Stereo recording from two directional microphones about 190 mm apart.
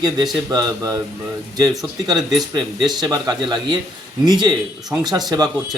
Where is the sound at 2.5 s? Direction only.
20° right (ahead or behind).